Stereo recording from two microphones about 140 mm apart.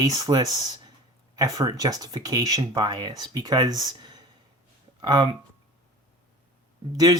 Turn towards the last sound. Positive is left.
turn(degrees=-25)  # may be behind; listen again after turning